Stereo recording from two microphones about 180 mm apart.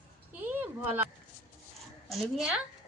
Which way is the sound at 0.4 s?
10° right (ahead or behind).